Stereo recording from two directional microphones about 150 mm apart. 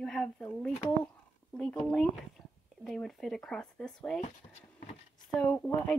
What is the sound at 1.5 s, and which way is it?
Speech, 5° left (ahead or behind).